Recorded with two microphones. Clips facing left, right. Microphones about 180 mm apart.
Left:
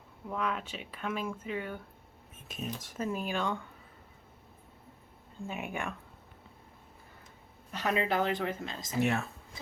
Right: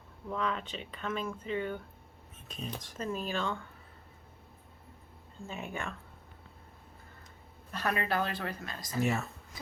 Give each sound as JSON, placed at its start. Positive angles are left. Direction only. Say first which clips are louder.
{"t": 0.3, "sound": "speech", "louder": "even", "side_deg": 5}
{"t": 5.4, "sound": "speech", "louder": "left 2 dB", "side_deg": 15}
{"t": 7.7, "sound": "speech", "louder": "left 2 dB", "side_deg": 20}
{"t": 9.0, "sound": "speech", "louder": "left 1 dB", "side_deg": 0}